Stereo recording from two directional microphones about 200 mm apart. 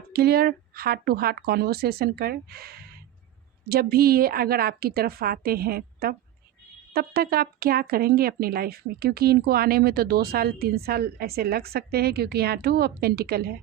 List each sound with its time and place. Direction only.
0.1 s speech: 50° right (ahead or behind)